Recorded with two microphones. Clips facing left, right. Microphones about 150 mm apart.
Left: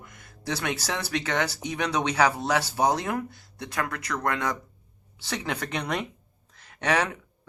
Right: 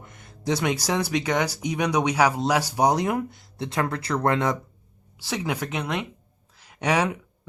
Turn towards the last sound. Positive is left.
turn(degrees=-10)  # may be behind; listen again after turning